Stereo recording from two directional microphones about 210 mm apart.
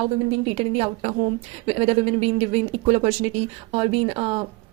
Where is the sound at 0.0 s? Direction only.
30° right (ahead or behind).